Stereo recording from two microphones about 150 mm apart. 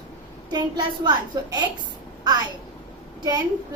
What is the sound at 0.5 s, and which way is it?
Speech, 30° right (ahead or behind).